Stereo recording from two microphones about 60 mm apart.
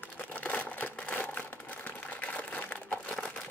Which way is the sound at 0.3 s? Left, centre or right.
Left.